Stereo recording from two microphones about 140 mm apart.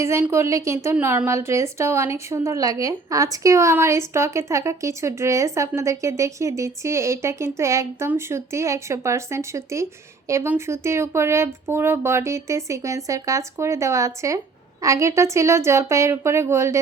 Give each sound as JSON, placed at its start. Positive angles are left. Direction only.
{"t": 0.0, "sound": "a woman's voice", "side_deg": -20}